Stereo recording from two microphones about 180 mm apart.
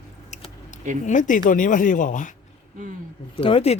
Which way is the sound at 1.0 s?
45° left (ahead or behind).